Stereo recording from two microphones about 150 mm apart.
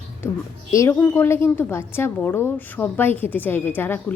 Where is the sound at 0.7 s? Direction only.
20° left (ahead or behind).